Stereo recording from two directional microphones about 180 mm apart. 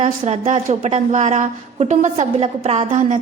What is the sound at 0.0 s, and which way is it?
A woman's voice, 35° right (ahead or behind).